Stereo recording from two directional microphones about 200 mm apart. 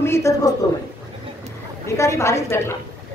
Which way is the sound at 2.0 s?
15° left (ahead or behind).